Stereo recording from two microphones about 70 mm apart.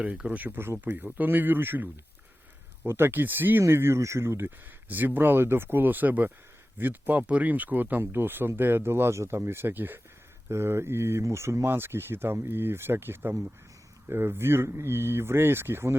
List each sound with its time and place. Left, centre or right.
0.0 s speech: centre; by 4.5 s right
4.9 s speech: right